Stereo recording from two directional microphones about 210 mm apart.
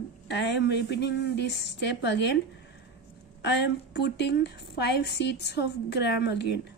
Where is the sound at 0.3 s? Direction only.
55° left (ahead or behind).